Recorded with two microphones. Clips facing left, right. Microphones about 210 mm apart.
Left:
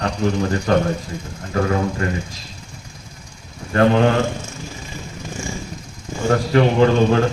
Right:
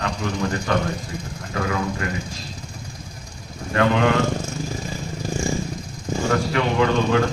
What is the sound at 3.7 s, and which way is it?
Speech, 35° left (ahead or behind).